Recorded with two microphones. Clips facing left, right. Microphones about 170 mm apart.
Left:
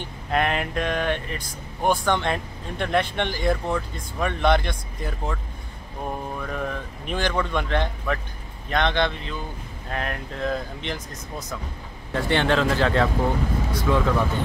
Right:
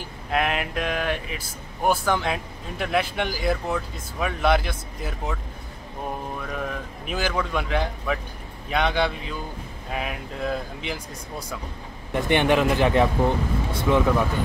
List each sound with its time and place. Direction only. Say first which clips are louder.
0.0 s speech: left 1 dB; centre (ahead or behind)
6.4 s speech: left 1 dB; centre (ahead or behind); by 14.1 s 20° right (ahead or behind)